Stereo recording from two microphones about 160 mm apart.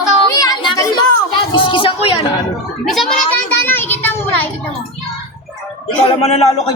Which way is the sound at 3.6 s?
10° left (ahead or behind).